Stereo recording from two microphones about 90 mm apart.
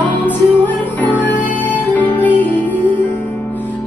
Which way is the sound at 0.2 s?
20° left (ahead or behind).